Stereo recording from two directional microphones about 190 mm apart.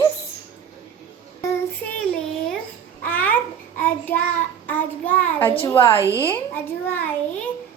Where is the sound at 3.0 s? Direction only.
10° left (ahead or behind).